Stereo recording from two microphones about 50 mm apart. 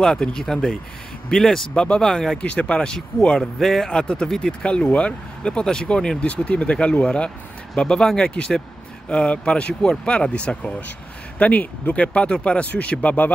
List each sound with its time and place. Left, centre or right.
0.0 s speech: centre
2.4 s speech: left
3.5 s speech: centre; by 10.7 s left
11.3 s speech: left